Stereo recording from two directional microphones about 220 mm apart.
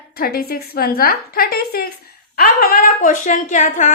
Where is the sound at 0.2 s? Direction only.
45° left (ahead or behind).